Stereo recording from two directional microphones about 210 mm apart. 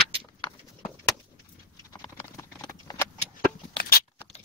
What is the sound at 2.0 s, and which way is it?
Clip-clop, 15° left (ahead or behind).